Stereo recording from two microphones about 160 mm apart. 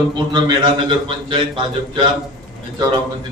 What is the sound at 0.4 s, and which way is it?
Speech, 30° right (ahead or behind).